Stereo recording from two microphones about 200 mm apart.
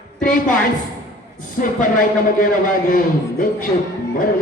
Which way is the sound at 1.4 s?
40° left (ahead or behind).